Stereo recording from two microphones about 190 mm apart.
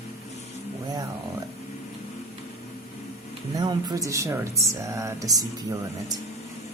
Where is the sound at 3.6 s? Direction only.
20° right (ahead or behind).